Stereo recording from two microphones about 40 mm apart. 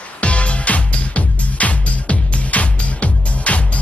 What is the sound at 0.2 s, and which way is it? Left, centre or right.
Music, left.